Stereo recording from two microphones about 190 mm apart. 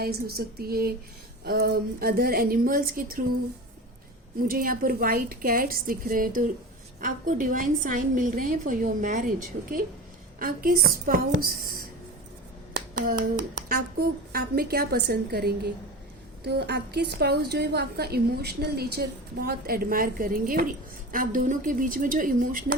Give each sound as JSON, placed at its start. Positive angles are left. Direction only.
{"t": 0.0, "sound": "a woman's voice", "side_deg": -55}
{"t": 4.4, "sound": "a woman's voice", "side_deg": -50}
{"t": 10.4, "sound": "a woman's voice", "side_deg": -50}
{"t": 12.7, "sound": "a woman's voice", "side_deg": -50}